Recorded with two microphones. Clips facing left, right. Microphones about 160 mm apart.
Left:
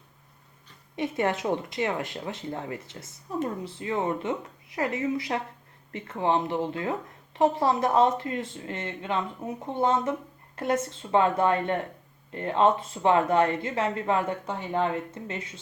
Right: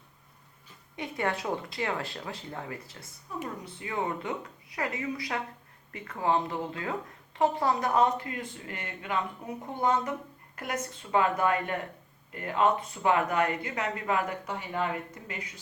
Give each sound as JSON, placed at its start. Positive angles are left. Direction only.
{"t": 0.9, "sound": "speech", "side_deg": 25}